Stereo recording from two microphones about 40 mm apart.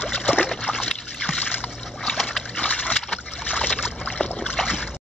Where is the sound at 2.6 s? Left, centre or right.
Left.